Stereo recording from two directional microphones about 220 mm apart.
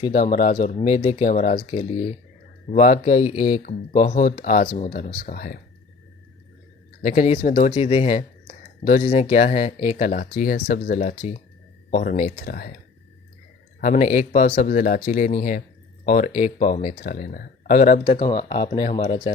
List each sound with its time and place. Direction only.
0.0 s speech: 35° left (ahead or behind)
7.0 s speech: 35° left (ahead or behind)
11.9 s speech: 40° left (ahead or behind)
13.8 s speech: 35° left (ahead or behind)
18.0 s speech: 20° left (ahead or behind)